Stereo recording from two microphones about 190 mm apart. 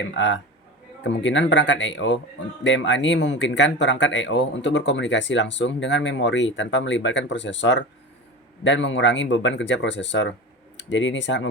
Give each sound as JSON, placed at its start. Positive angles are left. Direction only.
{"t": 1.0, "sound": "speech", "side_deg": 75}